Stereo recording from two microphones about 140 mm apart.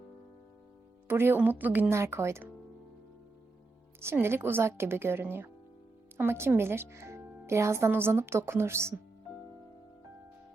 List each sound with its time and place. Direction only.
1.0 s a woman's voice: 15° right (ahead or behind)
4.0 s a woman's voice: 15° right (ahead or behind)